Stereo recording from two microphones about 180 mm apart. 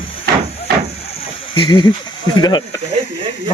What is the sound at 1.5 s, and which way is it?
Speech, 25° left (ahead or behind).